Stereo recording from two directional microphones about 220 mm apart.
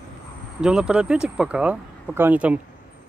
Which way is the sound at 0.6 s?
5° right (ahead or behind).